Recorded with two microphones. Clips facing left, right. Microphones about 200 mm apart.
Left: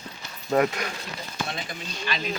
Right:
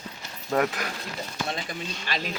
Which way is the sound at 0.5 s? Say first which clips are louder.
Left 3 dB; 5° left (ahead or behind).